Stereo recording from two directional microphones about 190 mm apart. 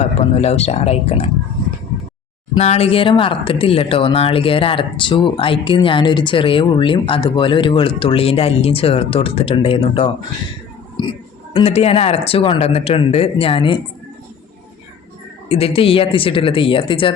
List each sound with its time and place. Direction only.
0.0 s speech: 35° left (ahead or behind)
2.6 s speech: 35° left (ahead or behind)
15.4 s speech: 30° left (ahead or behind)